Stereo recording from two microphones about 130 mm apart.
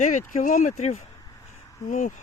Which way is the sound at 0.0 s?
70° left (ahead or behind).